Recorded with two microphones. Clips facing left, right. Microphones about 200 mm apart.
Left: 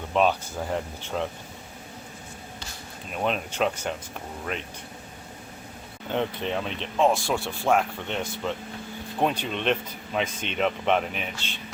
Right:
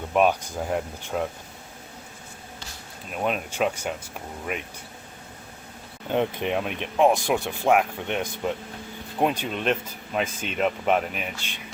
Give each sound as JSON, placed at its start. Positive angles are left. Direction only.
{"t": 0.1, "sound": "speech", "side_deg": -10}
{"t": 3.1, "sound": "speech", "side_deg": -5}
{"t": 6.1, "sound": "speech", "side_deg": -15}